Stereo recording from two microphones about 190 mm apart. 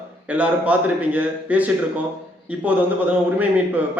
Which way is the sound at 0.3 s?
5° right (ahead or behind).